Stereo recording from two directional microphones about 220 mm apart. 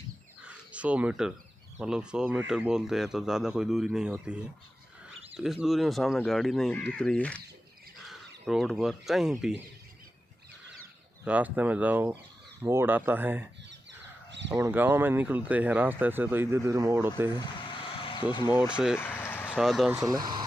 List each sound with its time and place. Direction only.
0.4 s crow: 5° right (ahead or behind)
1.8 s speech: 5° right (ahead or behind)
11.2 s speech: 5° right (ahead or behind)
14.5 s speech: 10° right (ahead or behind)
17.4 s a sound: 20° left (ahead or behind)
18.5 s speech: 5° right (ahead or behind)
18.9 s a sound: 10° left (ahead or behind)
19.9 s speech: 15° right (ahead or behind)